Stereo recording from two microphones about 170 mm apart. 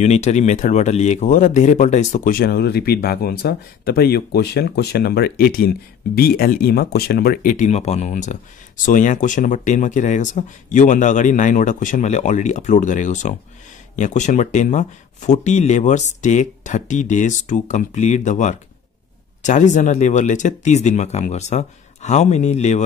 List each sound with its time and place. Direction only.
0.0 s speech: 40° left (ahead or behind)